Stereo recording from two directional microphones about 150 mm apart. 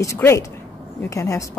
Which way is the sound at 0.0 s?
20° left (ahead or behind).